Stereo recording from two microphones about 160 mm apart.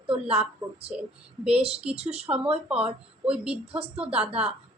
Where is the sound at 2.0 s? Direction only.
40° right (ahead or behind).